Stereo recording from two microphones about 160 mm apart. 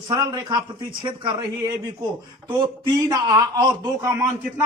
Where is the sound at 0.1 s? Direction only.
25° right (ahead or behind).